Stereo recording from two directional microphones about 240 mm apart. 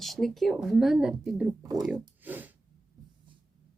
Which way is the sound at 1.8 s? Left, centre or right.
Centre.